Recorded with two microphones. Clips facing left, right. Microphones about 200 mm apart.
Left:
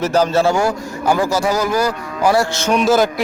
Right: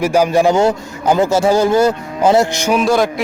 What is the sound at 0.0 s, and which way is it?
A man's voice, 10° right (ahead or behind).